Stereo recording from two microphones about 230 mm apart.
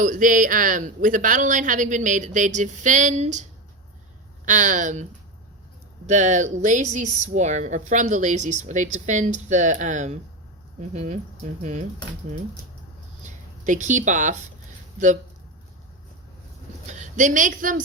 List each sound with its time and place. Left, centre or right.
0.0 s speech: right
4.4 s speech: right
6.1 s speech: right
13.2 s speech: right
16.8 s a woman's voice: right